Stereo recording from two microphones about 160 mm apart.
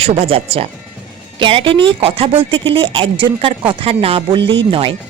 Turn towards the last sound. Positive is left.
turn(degrees=-35)  # may be behind; listen again after turning